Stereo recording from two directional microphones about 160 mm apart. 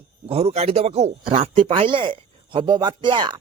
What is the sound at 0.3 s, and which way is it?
Speech, 40° right (ahead or behind).